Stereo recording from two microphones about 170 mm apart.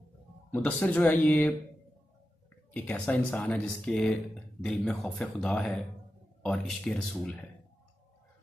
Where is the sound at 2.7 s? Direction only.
10° left (ahead or behind).